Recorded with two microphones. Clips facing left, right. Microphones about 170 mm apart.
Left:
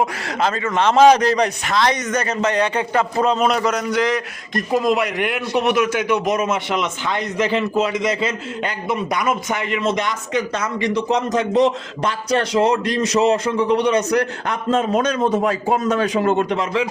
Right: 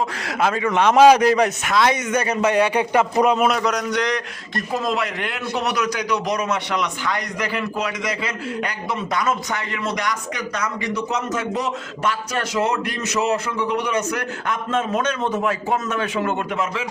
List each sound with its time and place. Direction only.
0.2 s a man's voice: 5° right (ahead or behind)
3.5 s a man's voice: centre (ahead or behind)
4.5 s a man's voice: 15° left (ahead or behind); by 16.8 s 35° left (ahead or behind)